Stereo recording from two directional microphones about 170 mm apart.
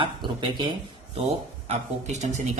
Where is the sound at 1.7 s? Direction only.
40° right (ahead or behind).